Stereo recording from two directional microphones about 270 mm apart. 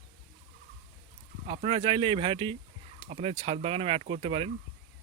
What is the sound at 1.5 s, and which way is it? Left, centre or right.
Speech, centre.